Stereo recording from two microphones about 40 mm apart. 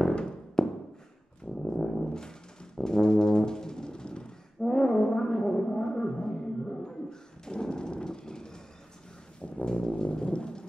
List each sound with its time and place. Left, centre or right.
0.1 s a sound: centre
1.4 s brass instrument: centre
4.6 s music: centre
9.7 s brass instrument: left